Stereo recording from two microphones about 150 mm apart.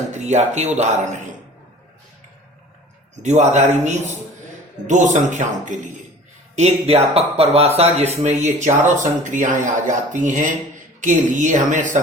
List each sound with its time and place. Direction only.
0.1 s speech: 50° right (ahead or behind)
3.2 s speech: 50° right (ahead or behind)
6.6 s speech: 45° right (ahead or behind)